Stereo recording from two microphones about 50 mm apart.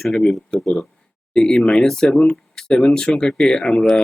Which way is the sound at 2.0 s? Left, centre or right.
Left.